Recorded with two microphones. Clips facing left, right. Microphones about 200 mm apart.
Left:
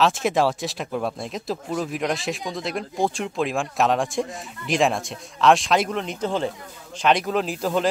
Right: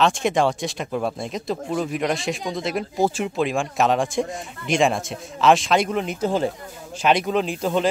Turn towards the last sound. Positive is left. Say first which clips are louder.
# right 1 dB
turn(degrees=0)  # may be behind; listen again after turning